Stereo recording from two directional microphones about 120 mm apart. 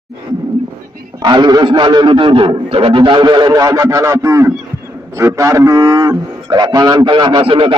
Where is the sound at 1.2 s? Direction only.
35° right (ahead or behind).